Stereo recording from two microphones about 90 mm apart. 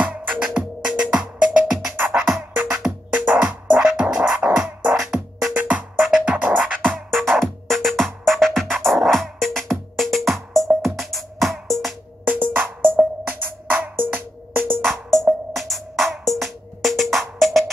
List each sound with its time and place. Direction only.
0.0 s music: 15° right (ahead or behind)
4.9 s music: 5° right (ahead or behind)
5.5 s music: 20° right (ahead or behind)
5.9 s music: 5° right (ahead or behind)
6.8 s music: 5° left (ahead or behind)
12.3 s music: 20° right (ahead or behind)
14.9 s music: 5° left (ahead or behind)